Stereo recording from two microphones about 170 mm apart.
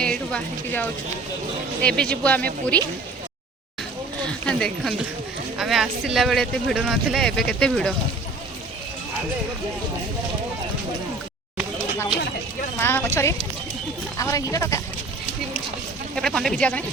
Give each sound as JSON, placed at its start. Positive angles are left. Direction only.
{"t": 0.0, "sound": "speech", "side_deg": 5}
{"t": 4.3, "sound": "speech", "side_deg": 5}
{"t": 12.8, "sound": "speech", "side_deg": 15}
{"t": 16.1, "sound": "speech", "side_deg": 5}